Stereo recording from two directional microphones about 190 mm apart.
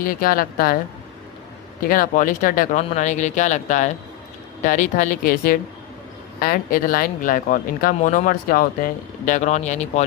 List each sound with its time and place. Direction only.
0.0 s speech: 50° left (ahead or behind)
1.9 s speech: 45° left (ahead or behind)